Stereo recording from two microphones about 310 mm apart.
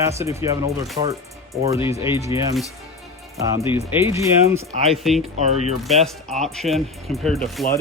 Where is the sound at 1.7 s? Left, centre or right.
Centre.